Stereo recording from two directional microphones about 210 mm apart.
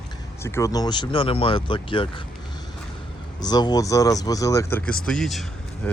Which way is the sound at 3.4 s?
20° left (ahead or behind).